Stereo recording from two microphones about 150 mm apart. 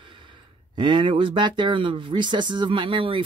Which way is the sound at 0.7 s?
30° right (ahead or behind).